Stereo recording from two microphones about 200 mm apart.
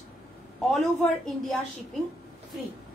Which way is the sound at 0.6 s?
Centre (ahead or behind).